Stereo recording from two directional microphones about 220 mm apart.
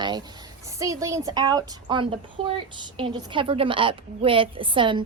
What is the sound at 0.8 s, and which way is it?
A woman's voice, 15° right (ahead or behind).